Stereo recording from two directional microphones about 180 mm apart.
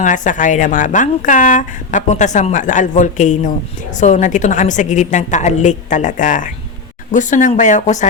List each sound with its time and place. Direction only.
0.0 s a woman's voice: 45° left (ahead or behind)